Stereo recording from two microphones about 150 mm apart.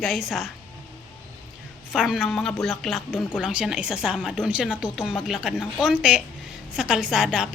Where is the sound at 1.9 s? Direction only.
5° right (ahead or behind).